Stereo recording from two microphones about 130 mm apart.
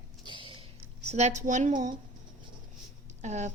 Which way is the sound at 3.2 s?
65° right (ahead or behind).